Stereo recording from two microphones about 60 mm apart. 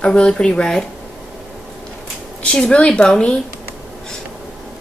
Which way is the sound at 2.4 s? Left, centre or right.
Centre.